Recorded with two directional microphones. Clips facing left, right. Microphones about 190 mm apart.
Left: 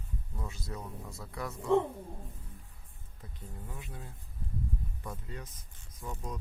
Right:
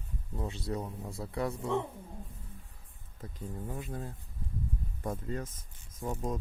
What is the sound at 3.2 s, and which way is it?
Speech, 45° right (ahead or behind).